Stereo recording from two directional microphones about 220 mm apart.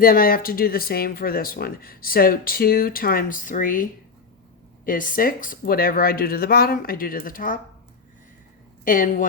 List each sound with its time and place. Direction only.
0.0 s speech: 40° left (ahead or behind)
4.9 s speech: 40° left (ahead or behind)
8.8 s speech: 40° left (ahead or behind)